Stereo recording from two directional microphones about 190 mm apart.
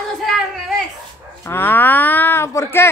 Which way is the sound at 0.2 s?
Centre (ahead or behind).